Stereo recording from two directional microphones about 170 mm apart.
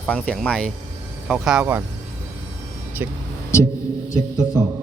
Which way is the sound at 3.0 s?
15° right (ahead or behind).